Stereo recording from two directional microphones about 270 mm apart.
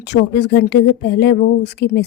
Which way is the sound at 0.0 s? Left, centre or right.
Left.